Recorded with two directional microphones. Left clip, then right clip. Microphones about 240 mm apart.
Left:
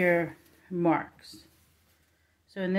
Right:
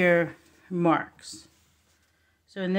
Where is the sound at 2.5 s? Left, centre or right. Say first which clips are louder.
Right 1 dB; centre.